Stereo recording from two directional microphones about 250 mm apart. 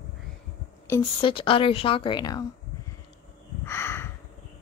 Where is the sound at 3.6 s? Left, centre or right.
Centre.